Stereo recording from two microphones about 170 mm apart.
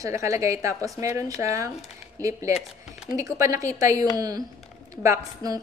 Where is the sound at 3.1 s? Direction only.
20° right (ahead or behind).